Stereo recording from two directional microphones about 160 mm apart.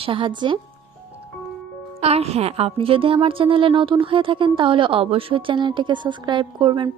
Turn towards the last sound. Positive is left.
turn(degrees=-30)  # may be behind; listen again after turning